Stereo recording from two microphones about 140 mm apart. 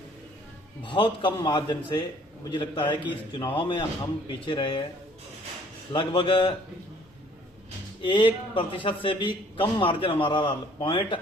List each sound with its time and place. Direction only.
0.9 s a man's voice: 35° left (ahead or behind)
5.9 s a man's voice: 35° left (ahead or behind)
8.0 s a man's voice: 35° left (ahead or behind)